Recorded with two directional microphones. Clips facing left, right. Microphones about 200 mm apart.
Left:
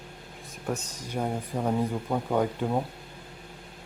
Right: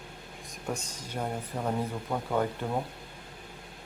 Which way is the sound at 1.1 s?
10° left (ahead or behind).